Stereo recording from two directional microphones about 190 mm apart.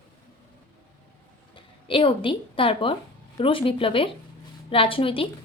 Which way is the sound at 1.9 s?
25° left (ahead or behind).